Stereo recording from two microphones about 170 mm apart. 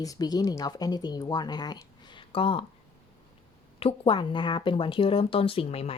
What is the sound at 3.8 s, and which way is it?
A woman's voice, 30° left (ahead or behind).